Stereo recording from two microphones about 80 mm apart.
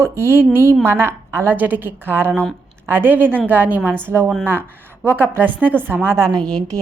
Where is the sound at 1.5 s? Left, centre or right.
Right.